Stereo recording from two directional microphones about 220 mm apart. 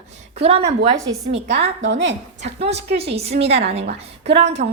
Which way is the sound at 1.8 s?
55° right (ahead or behind).